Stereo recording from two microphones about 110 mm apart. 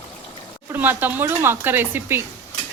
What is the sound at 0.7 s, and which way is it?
Speech, 15° right (ahead or behind).